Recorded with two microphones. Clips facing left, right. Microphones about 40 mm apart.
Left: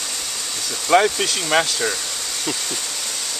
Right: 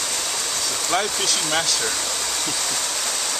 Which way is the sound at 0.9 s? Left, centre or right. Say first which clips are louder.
Left 8 dB; left.